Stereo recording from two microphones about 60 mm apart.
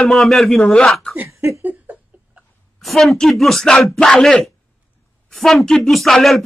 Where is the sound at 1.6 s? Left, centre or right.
Right.